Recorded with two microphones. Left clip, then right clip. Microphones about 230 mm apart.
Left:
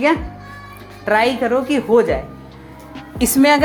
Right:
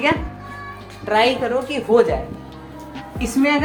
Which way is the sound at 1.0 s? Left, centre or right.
Left.